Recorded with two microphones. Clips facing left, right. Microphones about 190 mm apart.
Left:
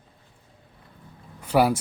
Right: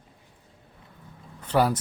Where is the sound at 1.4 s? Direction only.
10° left (ahead or behind).